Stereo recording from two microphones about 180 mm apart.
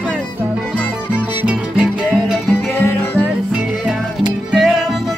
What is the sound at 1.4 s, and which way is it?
Music, 5° right (ahead or behind).